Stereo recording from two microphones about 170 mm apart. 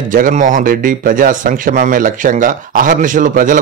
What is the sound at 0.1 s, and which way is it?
Speech, 50° right (ahead or behind).